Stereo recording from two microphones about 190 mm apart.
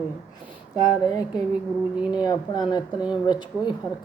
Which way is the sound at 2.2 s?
20° left (ahead or behind).